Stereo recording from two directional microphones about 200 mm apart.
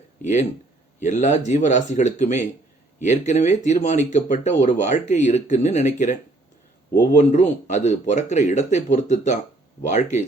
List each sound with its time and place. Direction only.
0.2 s a man's voice: 35° left (ahead or behind)